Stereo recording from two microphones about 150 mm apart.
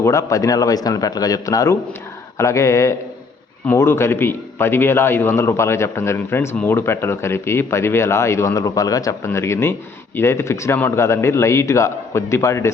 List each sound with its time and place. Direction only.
0.0 s a man's voice: 20° left (ahead or behind)